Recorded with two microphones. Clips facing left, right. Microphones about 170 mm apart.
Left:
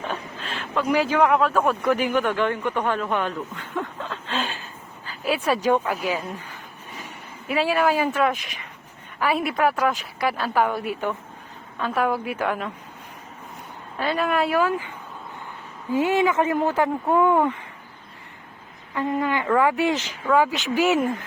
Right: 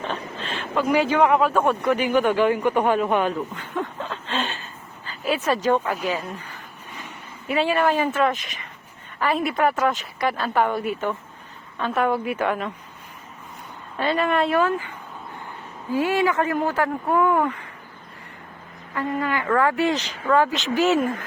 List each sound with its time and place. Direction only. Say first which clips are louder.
0.1 s speech: right 2 dB; 5° left (ahead or behind)
4.3 s a sound: even; 5° left (ahead or behind)
5.5 s speech: left 1 dB; 15° left (ahead or behind)
5.8 s speech: even; 5° left (ahead or behind)
7.4 s speech: even; 5° left (ahead or behind)
14.0 s speech: right 1 dB; centre (ahead or behind); by 17.5 s 20° left (ahead or behind)
18.9 s speech: left 1 dB; 20° left (ahead or behind)